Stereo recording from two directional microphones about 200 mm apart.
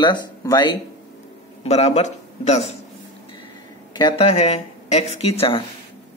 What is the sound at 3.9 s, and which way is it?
Speech, 20° left (ahead or behind).